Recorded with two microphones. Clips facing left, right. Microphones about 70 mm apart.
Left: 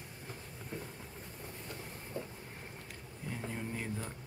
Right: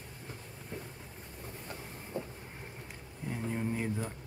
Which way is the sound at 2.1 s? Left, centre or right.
Right.